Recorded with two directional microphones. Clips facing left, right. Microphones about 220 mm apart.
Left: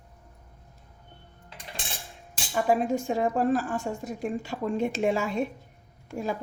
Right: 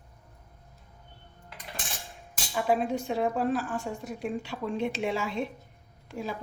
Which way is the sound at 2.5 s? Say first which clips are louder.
Left 2 dB; 45° left (ahead or behind).